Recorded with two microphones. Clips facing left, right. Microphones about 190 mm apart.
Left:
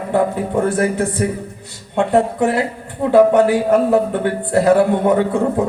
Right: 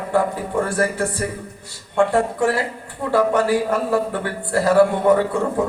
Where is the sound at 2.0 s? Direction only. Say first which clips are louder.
Left 2 dB; 20° left (ahead or behind).